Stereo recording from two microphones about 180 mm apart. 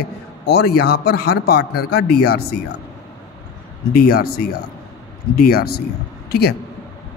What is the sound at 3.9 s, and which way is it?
Speech, 60° left (ahead or behind).